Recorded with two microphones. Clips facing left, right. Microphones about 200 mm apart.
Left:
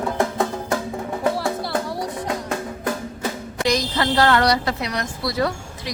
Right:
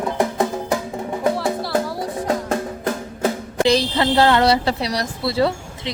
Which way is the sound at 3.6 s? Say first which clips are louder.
Right 3 dB; 30° right (ahead or behind).